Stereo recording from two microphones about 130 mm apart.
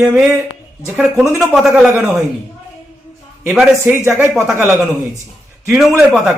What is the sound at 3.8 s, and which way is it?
Speech, 20° right (ahead or behind).